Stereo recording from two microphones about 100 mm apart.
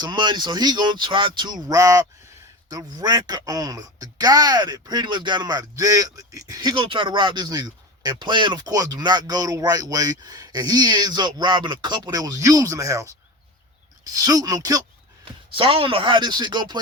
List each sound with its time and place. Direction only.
0.0 s speech: 50° right (ahead or behind)
1.7 s speech: 35° right (ahead or behind)
15.2 s speech: 65° right (ahead or behind); by 16.8 s 45° right (ahead or behind)